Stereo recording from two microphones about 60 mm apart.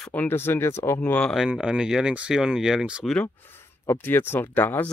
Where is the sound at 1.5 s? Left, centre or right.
Centre.